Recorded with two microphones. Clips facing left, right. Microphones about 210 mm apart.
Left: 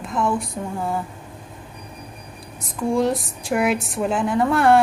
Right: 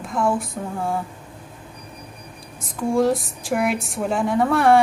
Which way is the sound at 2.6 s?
Centre (ahead or behind).